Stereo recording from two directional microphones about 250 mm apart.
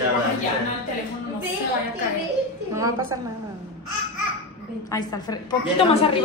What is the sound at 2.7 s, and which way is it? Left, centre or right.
Speech, centre.